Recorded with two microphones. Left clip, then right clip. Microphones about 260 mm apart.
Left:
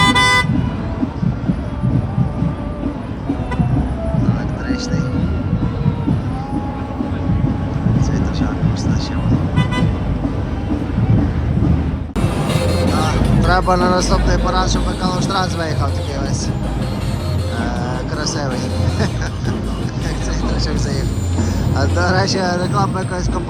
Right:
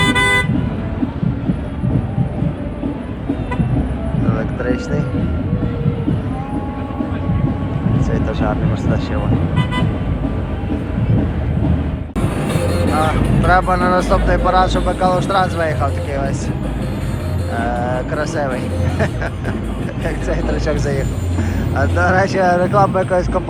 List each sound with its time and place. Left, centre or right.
0.2 s vehicle: left
4.7 s vehicle: centre
13.5 s speech: centre
17.6 s music: centre
20.7 s speech: centre